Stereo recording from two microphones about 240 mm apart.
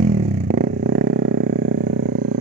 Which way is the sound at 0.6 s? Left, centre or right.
Right.